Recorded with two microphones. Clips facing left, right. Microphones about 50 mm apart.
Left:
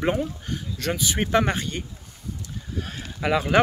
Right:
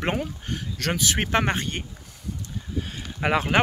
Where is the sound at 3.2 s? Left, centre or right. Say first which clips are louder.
Even; right.